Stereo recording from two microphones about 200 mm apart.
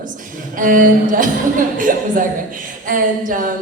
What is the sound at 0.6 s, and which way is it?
A woman's voice, 40° right (ahead or behind).